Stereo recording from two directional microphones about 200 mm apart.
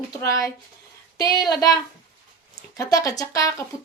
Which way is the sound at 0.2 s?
15° left (ahead or behind).